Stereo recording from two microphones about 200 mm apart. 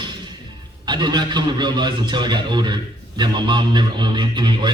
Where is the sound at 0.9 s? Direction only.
20° right (ahead or behind).